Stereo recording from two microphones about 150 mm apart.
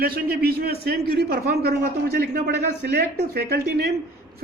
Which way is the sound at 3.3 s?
90° right.